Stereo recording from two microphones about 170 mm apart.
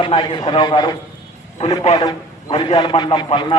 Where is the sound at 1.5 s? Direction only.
35° left (ahead or behind).